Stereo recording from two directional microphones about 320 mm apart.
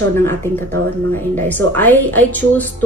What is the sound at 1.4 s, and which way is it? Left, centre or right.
Speech, centre.